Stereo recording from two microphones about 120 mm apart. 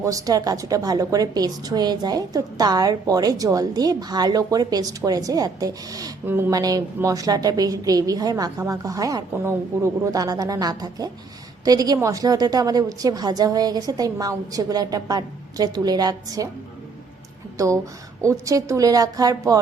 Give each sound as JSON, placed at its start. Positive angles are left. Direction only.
{"t": 0.0, "sound": "a woman's voice", "side_deg": -30}
{"t": 18.2, "sound": "a woman's voice", "side_deg": -25}